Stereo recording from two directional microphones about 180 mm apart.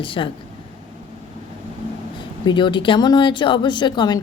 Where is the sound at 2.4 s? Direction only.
25° left (ahead or behind).